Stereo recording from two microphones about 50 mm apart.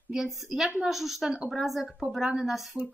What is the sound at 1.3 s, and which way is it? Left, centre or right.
Speech, centre.